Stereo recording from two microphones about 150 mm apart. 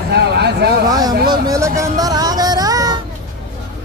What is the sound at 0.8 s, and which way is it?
Speech, 25° right (ahead or behind).